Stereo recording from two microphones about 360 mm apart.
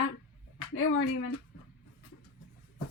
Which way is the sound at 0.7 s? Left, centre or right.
Left.